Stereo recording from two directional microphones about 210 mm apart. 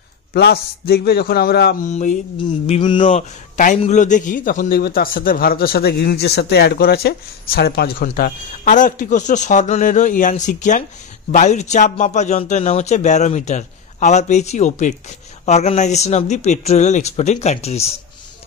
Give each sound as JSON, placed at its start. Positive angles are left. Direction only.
{"t": 0.3, "sound": "a man's voice", "side_deg": 50}
{"t": 1.9, "sound": "a man's voice", "side_deg": 35}
{"t": 2.3, "sound": "a sound", "side_deg": 25}
{"t": 3.5, "sound": "a man's voice", "side_deg": 35}